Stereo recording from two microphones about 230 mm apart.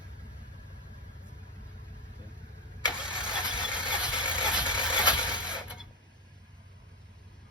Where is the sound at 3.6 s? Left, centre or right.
Centre.